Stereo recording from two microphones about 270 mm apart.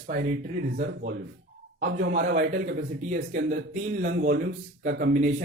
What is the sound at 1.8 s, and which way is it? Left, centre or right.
A man's voice, right.